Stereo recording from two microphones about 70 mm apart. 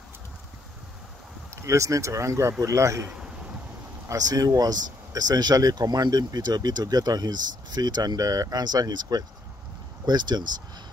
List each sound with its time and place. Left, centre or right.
1.5 s speech: right
4.1 s speech: right
8.2 s speech: right
10.0 s speech: right